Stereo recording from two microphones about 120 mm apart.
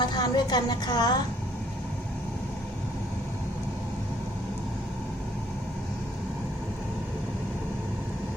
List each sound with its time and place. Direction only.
0.0 s a woman's voice: 40° left (ahead or behind)